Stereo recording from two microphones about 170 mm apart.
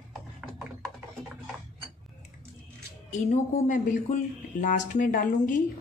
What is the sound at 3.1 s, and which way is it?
Speech, 45° left (ahead or behind).